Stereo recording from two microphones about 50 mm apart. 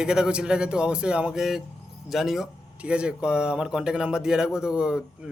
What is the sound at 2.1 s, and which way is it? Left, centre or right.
Speech, centre.